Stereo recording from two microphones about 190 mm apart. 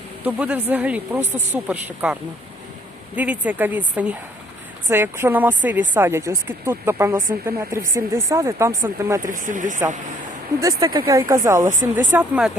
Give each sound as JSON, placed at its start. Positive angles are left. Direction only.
{"t": 0.3, "sound": "speech", "side_deg": -5}
{"t": 3.2, "sound": "speech", "side_deg": -10}
{"t": 9.2, "sound": "speech", "side_deg": -45}
{"t": 10.6, "sound": "speech", "side_deg": -20}